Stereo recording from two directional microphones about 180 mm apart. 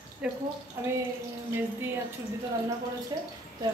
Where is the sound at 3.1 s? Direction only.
25° right (ahead or behind).